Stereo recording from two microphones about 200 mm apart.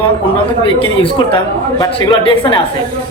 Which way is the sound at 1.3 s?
20° left (ahead or behind).